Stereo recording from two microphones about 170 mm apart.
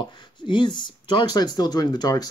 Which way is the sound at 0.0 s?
25° left (ahead or behind).